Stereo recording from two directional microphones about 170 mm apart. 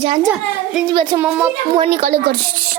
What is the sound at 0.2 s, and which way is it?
A child's voice, centre (ahead or behind).